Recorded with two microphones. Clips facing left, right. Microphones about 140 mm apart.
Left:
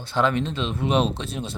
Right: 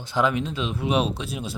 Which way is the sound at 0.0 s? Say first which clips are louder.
Left 1 dB; 15° right (ahead or behind).